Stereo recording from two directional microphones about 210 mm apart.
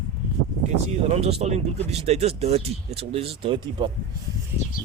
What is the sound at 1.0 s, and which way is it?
Speech, 30° right (ahead or behind).